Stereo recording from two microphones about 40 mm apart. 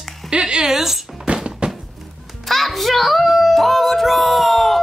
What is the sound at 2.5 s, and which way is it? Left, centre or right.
Music, centre.